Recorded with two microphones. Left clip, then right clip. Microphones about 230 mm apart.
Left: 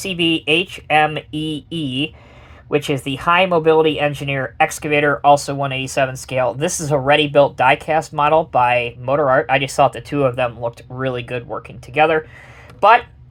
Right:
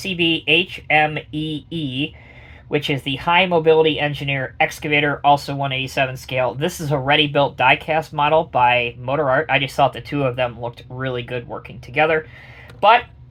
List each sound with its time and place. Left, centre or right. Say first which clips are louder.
0.0 s speech: left 1 dB; left